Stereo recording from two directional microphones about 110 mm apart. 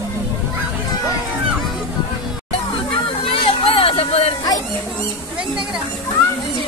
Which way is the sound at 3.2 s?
55° left (ahead or behind).